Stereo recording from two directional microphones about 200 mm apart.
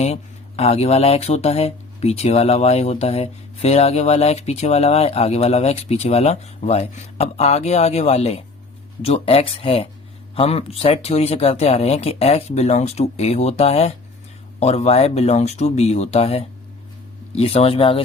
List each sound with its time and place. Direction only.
0.0 s speech: 30° left (ahead or behind)